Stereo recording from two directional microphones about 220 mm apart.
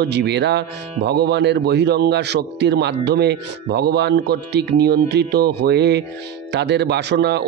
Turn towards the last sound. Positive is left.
turn(degrees=-50)  # may be behind; listen again after turning